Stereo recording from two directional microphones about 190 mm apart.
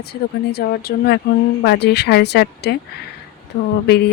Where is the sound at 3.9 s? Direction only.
60° left (ahead or behind).